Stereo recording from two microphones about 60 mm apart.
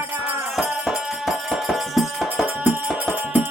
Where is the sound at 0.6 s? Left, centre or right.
Centre.